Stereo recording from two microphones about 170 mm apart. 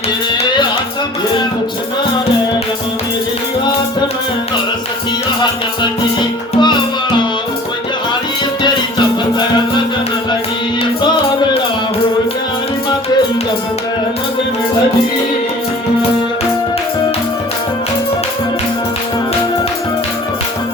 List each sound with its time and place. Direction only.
5.4 s music: 25° left (ahead or behind)